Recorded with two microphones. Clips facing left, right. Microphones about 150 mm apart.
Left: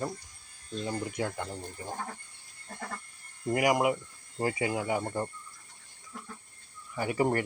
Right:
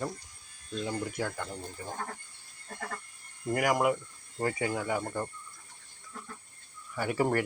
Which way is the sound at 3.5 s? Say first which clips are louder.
Left 1 dB; 5° left (ahead or behind).